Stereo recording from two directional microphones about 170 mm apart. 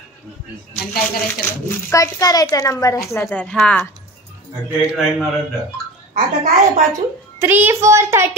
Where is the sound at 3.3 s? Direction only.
5° left (ahead or behind).